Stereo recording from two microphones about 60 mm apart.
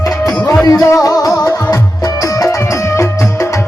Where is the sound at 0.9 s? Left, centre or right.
Left.